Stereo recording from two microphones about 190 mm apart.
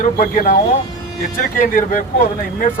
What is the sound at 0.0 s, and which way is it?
Speech, 45° left (ahead or behind).